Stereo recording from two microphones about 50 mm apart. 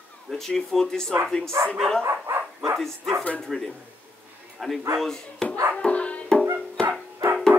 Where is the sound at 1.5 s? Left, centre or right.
Right.